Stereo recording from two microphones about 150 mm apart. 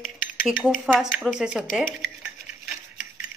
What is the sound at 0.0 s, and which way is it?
Cutlery, centre (ahead or behind).